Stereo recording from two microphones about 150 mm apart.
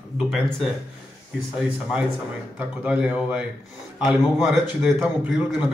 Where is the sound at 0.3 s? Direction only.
Centre (ahead or behind).